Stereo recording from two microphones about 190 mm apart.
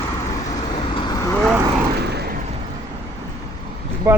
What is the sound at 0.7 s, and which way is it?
Vehicle, 25° left (ahead or behind).